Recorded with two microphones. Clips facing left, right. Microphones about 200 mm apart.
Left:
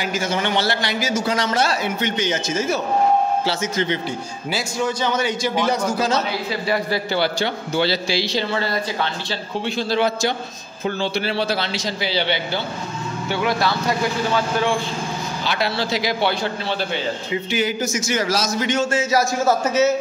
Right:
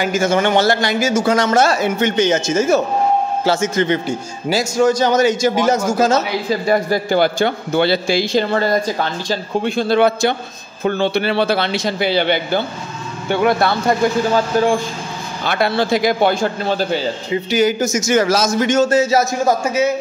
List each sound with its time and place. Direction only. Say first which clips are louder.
0.0 s a man's voice: right 7 dB; 50° right (ahead or behind)
14.3 s speech: right 5 dB; 40° right (ahead or behind)
15.4 s a man's voice: right 7 dB; 55° right (ahead or behind)
19.1 s a man's voice: right 3 dB; 15° right (ahead or behind)